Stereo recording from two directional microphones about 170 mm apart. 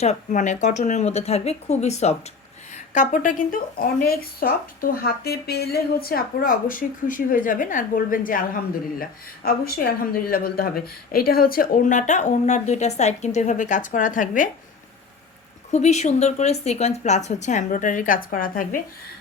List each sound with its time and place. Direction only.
0.0 s a woman's voice: 45° left (ahead or behind)
15.7 s a woman's voice: 40° left (ahead or behind)